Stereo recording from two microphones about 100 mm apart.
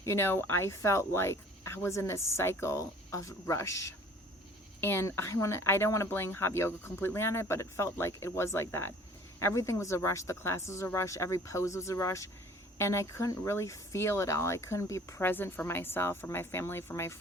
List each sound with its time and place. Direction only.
0.0 s speech: 25° left (ahead or behind)